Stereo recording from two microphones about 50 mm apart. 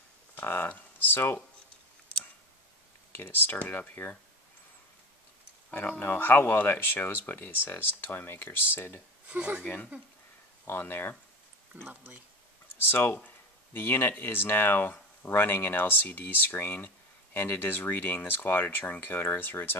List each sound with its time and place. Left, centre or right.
0.4 s speech: left
3.1 s speech: left
5.7 s speech: left
9.3 s speech: right
9.6 s speech: left
10.6 s speech: left
11.7 s speech: right
12.9 s speech: left